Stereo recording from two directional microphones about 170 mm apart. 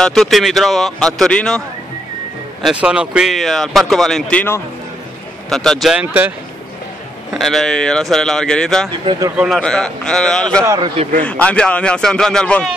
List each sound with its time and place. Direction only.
0.0 s speech: centre (ahead or behind)
2.6 s speech: 5° right (ahead or behind)
7.3 s speech: centre (ahead or behind)
10.6 s a man's voice: 20° right (ahead or behind)
11.1 s speech: 5° left (ahead or behind)